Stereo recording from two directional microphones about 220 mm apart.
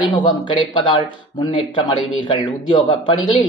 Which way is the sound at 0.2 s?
20° left (ahead or behind).